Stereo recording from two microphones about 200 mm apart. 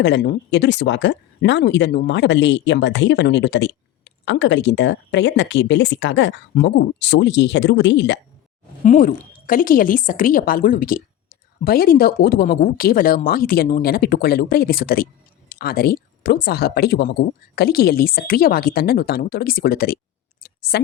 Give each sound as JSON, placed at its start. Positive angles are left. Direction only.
{"t": 0.0, "sound": "speech", "side_deg": 60}
{"t": 8.8, "sound": "speech", "side_deg": 40}
{"t": 20.4, "sound": "a sound", "side_deg": 50}